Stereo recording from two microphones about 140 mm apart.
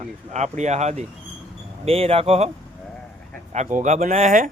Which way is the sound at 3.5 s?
60° right (ahead or behind).